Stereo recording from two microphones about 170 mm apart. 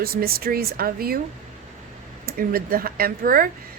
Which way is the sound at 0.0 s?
65° right (ahead or behind).